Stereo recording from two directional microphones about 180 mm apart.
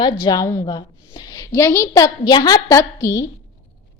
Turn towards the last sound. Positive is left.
turn(degrees=15)  # may be behind; listen again after turning